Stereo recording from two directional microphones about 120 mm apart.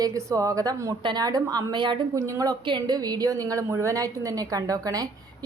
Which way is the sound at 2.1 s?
30° right (ahead or behind).